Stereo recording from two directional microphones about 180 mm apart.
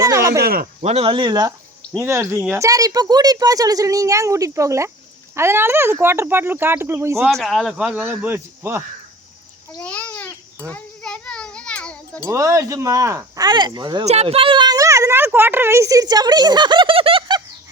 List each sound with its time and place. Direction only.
0.0 s speech: 15° right (ahead or behind)
0.3 s speech: 55° right (ahead or behind)
0.8 s speech: 35° right (ahead or behind); by 7.3 s 15° right (ahead or behind)
7.3 s speech: centre (ahead or behind)
9.8 s babbling: 5° left (ahead or behind)
10.7 s a sound: 5° left (ahead or behind)
12.2 s speech: 15° right (ahead or behind)
14.0 s speech: 35° right (ahead or behind)